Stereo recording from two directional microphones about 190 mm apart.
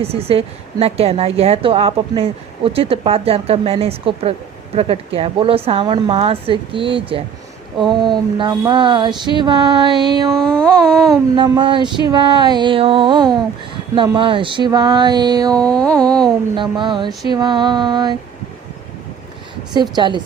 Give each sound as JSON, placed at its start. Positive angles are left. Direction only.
{"t": 0.0, "sound": "a woman's voice", "side_deg": -30}
{"t": 7.9, "sound": "music", "side_deg": -25}
{"t": 10.3, "sound": "a sound", "side_deg": 5}
{"t": 11.3, "sound": "music", "side_deg": -25}
{"t": 15.5, "sound": "a sound", "side_deg": 5}
{"t": 16.6, "sound": "music", "side_deg": -25}
{"t": 19.7, "sound": "music", "side_deg": -25}